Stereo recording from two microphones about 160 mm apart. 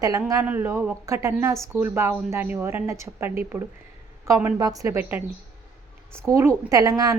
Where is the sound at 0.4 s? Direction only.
10° right (ahead or behind).